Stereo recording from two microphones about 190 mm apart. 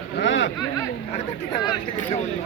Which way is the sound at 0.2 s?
75° left (ahead or behind).